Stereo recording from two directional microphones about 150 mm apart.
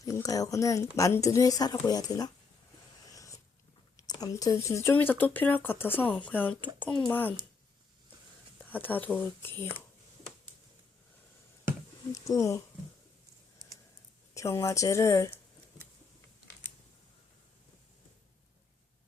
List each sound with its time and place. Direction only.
0.0 s speech: 25° left (ahead or behind)
3.1 s cat: 20° left (ahead or behind)
3.9 s speech: 25° left (ahead or behind)
8.5 s speech: 10° left (ahead or behind)
12.1 s speech: 20° left (ahead or behind)
14.3 s speech: 20° left (ahead or behind)